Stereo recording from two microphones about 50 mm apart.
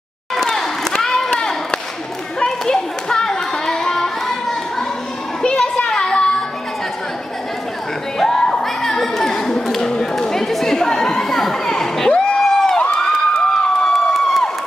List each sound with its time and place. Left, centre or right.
0.4 s a sound: centre
5.4 s children playing: centre
8.2 s a sound: centre
11.7 s crowd: centre
12.1 s music: centre
12.9 s crowd: centre